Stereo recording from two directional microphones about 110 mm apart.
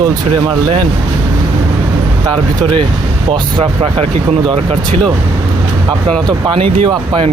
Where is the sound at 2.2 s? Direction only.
40° right (ahead or behind).